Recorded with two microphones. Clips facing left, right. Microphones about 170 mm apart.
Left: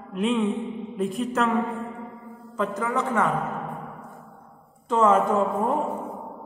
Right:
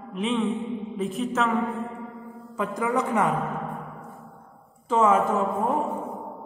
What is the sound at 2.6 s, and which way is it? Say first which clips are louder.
Speech: even; 15° right (ahead or behind).